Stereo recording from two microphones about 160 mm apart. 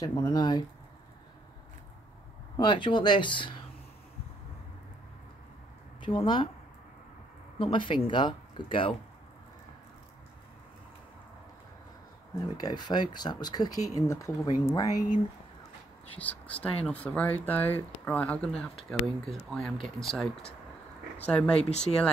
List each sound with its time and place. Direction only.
0.0 s speech: 25° left (ahead or behind)
2.5 s speech: 30° left (ahead or behind)
5.9 s speech: 30° left (ahead or behind)
7.5 s speech: 30° left (ahead or behind)
12.5 s speech: 25° left (ahead or behind)
16.1 s speech: 10° left (ahead or behind)
21.5 s speech: 40° left (ahead or behind)